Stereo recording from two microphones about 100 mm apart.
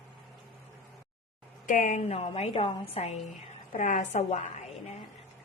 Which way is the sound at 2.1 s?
85° left.